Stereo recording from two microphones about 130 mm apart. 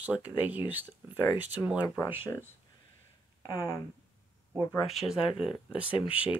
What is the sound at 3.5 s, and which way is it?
Speech, 30° left (ahead or behind).